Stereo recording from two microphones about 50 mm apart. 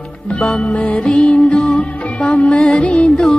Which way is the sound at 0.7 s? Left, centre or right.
Left.